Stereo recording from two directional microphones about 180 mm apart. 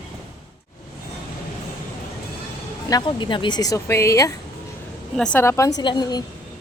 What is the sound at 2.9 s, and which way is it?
A woman's voice, 25° left (ahead or behind).